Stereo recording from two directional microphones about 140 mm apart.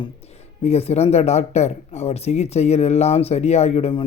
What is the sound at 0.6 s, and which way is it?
Speech, 50° left (ahead or behind).